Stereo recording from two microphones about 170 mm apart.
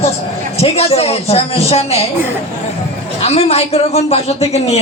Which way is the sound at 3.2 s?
35° left (ahead or behind).